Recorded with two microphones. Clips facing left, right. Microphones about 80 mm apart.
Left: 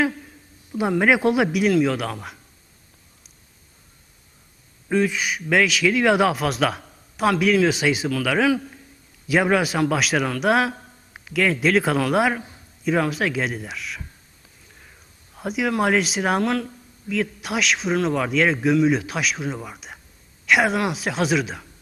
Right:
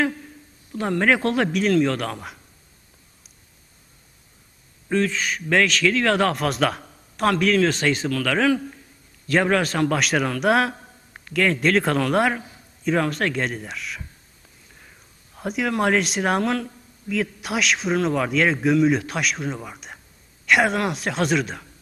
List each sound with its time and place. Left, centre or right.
0.7 s speech: centre
4.9 s a man's voice: centre
14.4 s a sound: centre
15.4 s a man's voice: centre